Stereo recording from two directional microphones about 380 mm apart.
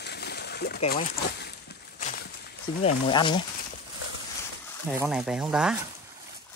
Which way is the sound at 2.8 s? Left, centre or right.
Centre.